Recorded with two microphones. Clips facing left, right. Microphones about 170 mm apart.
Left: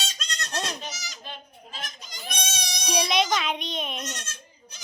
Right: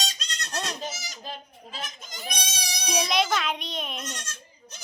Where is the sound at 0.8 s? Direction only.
50° right (ahead or behind).